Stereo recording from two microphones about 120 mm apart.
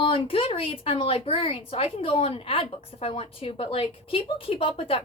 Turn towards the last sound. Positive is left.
turn(degrees=50)  # may be behind; listen again after turning